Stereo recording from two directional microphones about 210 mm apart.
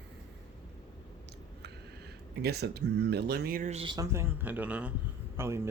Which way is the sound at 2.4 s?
50° right (ahead or behind).